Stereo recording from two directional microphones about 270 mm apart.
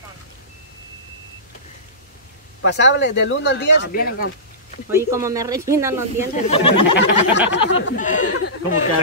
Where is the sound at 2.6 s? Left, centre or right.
Left.